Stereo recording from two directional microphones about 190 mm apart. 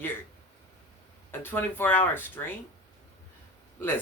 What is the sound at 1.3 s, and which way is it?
Speech, 10° left (ahead or behind).